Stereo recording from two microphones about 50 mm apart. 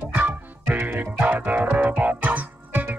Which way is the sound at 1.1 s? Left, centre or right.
Right.